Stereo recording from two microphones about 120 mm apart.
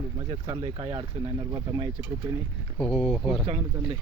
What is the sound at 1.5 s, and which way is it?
Speech, 35° right (ahead or behind).